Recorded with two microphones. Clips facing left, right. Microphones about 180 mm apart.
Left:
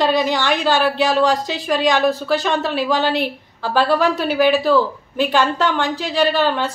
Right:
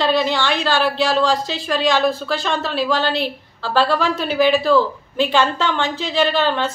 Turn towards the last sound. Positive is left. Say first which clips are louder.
# left 1 dB
turn(degrees=10)  # may be behind; listen again after turning